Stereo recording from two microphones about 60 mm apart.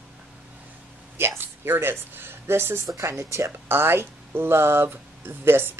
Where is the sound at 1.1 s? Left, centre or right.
Right.